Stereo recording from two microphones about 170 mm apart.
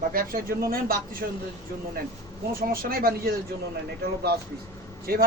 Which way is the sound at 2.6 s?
60° right (ahead or behind).